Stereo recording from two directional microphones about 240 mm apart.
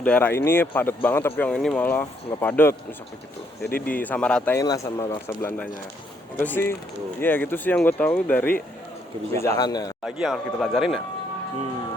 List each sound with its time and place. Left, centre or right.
0.0 s speech: centre
3.6 s speech: left
3.9 s speech: centre
9.6 s speech: centre
10.0 s speech: centre